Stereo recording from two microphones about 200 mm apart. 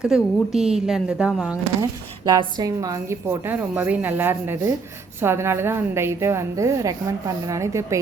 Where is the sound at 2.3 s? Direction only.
20° right (ahead or behind).